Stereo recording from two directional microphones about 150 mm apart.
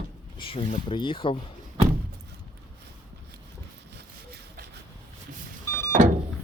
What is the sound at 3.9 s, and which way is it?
Sawing, 90° right.